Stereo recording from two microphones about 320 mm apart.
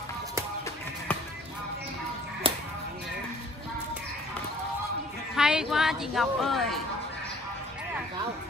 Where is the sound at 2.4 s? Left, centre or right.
Centre.